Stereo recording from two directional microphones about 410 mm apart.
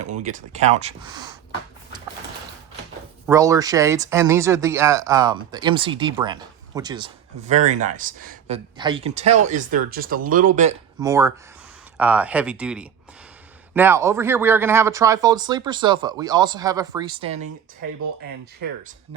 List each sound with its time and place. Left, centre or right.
0.2 s speech: centre
3.2 s speech: centre